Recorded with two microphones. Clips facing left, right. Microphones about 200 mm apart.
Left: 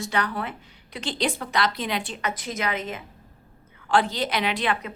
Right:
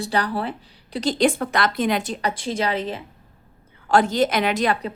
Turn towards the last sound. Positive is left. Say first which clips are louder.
# right 5 dB
turn(degrees=-35)  # may be behind; listen again after turning